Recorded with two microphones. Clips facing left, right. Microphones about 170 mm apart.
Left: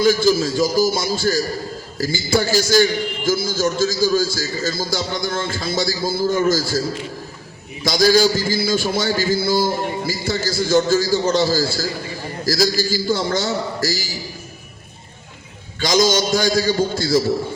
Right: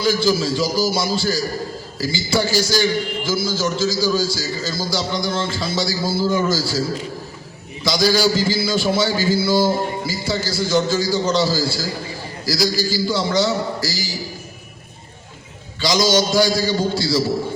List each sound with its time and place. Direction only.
0.0 s a man's voice: 45° left (ahead or behind)
7.9 s a man's voice: 50° left (ahead or behind)
15.8 s a man's voice: 50° left (ahead or behind)